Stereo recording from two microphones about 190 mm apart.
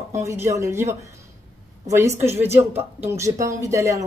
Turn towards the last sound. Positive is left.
turn(degrees=-15)  # may be behind; listen again after turning